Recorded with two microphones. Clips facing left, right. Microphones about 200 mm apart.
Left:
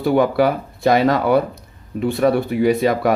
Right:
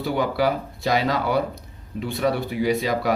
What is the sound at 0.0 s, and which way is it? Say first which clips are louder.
Speech: left 7 dB; 55° left (ahead or behind).